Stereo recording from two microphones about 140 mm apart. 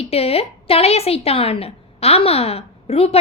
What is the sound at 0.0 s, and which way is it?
A woman's voice, 45° left (ahead or behind).